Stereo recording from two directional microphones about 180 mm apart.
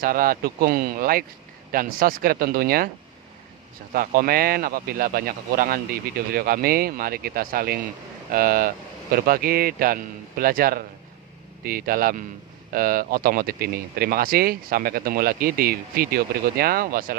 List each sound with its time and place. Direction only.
0.0 s a man's voice: 55° right (ahead or behind)
3.9 s a man's voice: 50° right (ahead or behind)